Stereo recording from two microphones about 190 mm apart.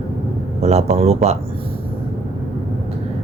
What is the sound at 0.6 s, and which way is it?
Speech, 35° right (ahead or behind).